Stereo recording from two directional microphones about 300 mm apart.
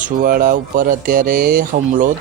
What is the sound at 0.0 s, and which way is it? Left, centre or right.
A man's voice, right.